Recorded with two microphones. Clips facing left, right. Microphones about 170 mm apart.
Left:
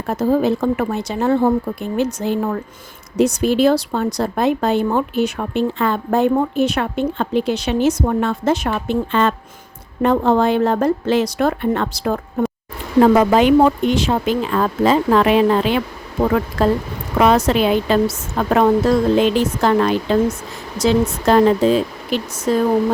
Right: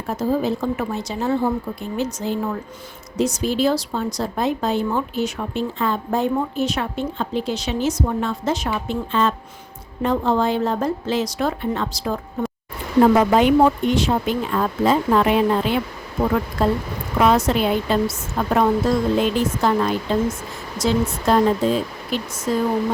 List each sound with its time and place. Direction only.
0.1 s a woman's voice: 60° left (ahead or behind)
13.3 s speech: 90° left
17.2 s a woman's voice: 75° left (ahead or behind)
19.1 s a woman's voice: 90° left; by 22.6 s 75° left (ahead or behind)